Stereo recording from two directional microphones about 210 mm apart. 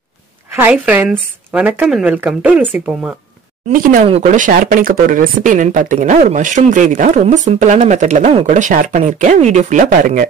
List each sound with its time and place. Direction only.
0.6 s speech: 10° right (ahead or behind)
3.7 s speech: 40° right (ahead or behind)